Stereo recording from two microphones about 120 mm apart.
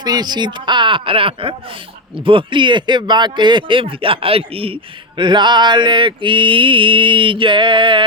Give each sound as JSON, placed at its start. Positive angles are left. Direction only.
{"t": 0.0, "sound": "speech", "side_deg": -35}